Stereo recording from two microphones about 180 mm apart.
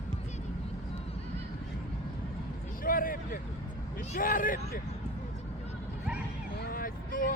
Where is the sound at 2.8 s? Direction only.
50° left (ahead or behind).